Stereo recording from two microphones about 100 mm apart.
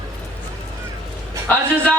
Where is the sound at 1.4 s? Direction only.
15° left (ahead or behind).